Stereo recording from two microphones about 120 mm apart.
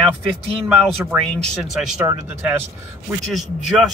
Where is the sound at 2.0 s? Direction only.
20° right (ahead or behind).